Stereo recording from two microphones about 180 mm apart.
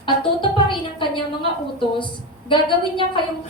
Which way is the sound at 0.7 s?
30° left (ahead or behind).